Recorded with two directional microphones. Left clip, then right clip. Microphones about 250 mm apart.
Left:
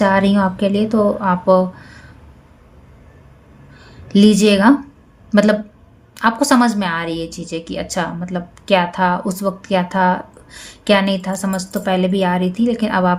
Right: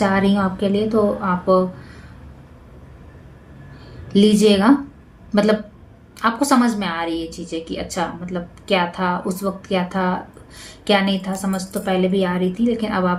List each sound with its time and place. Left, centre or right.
0.0 s a woman's voice: left
4.1 s a woman's voice: left